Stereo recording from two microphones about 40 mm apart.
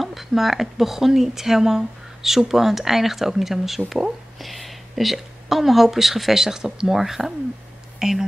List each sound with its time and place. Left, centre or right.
0.0 s speech: centre